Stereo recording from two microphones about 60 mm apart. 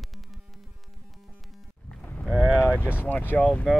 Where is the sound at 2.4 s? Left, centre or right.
Right.